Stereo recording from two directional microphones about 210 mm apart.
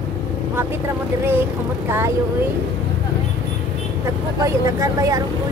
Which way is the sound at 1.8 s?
10° right (ahead or behind).